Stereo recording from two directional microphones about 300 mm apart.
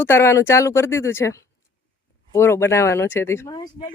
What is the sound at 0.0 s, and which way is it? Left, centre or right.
Speech, centre.